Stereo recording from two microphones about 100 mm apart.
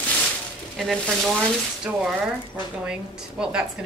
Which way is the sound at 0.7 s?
Centre (ahead or behind).